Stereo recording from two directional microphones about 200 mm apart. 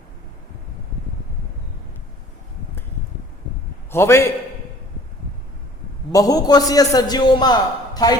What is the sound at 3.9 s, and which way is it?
Speech, 15° left (ahead or behind).